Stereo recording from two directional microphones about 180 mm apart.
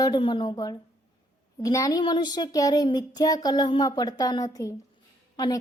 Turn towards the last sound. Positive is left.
turn(degrees=25)  # may be behind; listen again after turning